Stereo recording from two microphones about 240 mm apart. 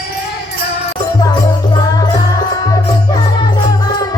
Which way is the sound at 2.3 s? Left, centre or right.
Centre.